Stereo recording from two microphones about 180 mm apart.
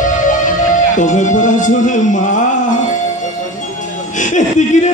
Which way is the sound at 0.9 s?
45° left (ahead or behind).